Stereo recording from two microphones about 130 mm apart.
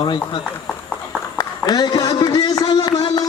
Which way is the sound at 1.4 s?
30° left (ahead or behind).